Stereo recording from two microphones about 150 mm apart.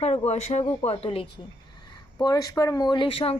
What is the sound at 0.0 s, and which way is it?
Speech, 45° left (ahead or behind).